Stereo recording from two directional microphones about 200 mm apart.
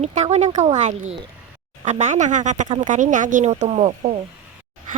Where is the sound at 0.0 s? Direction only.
35° right (ahead or behind).